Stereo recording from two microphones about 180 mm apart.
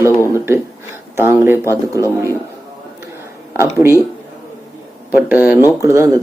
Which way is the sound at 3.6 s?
15° right (ahead or behind).